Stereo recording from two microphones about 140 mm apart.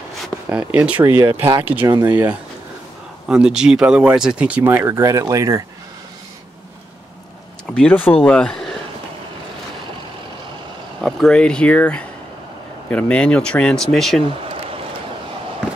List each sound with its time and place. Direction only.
0.5 s speech: 10° right (ahead or behind)
1.9 s speech: 30° right (ahead or behind)
3.3 s speech: 5° right (ahead or behind); by 5.6 s 20° right (ahead or behind)
7.7 s speech: 10° left (ahead or behind)
11.0 s speech: 5° left (ahead or behind)